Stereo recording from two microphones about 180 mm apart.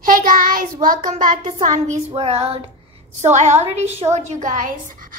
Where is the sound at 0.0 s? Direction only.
50° right (ahead or behind); by 2.6 s 35° right (ahead or behind).